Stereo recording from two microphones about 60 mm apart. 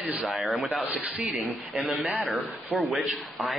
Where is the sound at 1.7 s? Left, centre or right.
Right.